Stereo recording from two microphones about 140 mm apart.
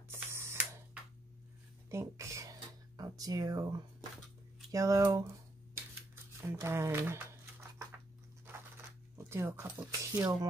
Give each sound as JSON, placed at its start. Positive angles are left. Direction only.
{"t": 0.1, "sound": "mechanisms", "side_deg": -20}
{"t": 1.9, "sound": "speech", "side_deg": -20}
{"t": 3.0, "sound": "a sound", "side_deg": -25}
{"t": 4.6, "sound": "speech", "side_deg": -25}
{"t": 6.4, "sound": "speech", "side_deg": -20}
{"t": 9.2, "sound": "speech", "side_deg": -15}